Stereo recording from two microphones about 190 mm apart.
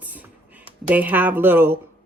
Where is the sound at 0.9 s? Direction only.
10° right (ahead or behind).